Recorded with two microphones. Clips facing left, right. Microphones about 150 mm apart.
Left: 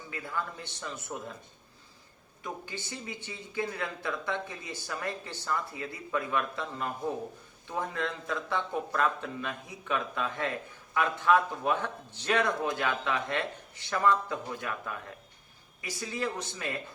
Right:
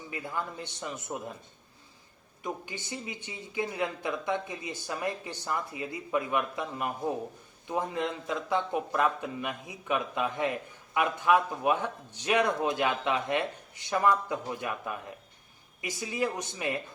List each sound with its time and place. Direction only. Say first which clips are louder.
0.1 s a man's voice: right 1 dB; 20° right (ahead or behind)
2.4 s speech: right 2 dB; 15° right (ahead or behind)